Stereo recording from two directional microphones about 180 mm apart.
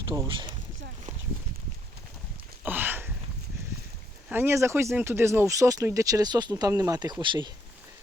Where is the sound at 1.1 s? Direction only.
45° right (ahead or behind).